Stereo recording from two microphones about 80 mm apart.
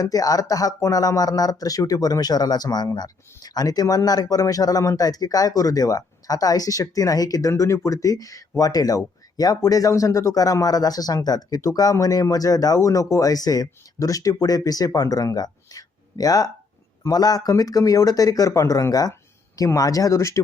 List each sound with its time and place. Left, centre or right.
0.0 s speech: left